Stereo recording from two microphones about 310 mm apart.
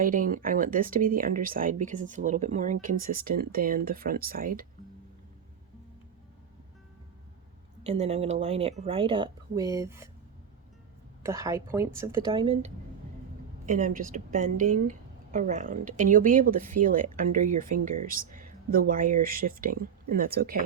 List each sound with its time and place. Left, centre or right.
0.0 s a woman's voice: right
7.9 s a woman's voice: centre
11.2 s a woman's voice: centre; by 20.6 s right